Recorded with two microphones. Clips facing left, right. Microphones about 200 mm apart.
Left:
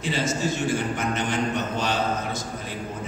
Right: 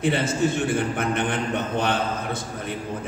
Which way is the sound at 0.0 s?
60° right (ahead or behind).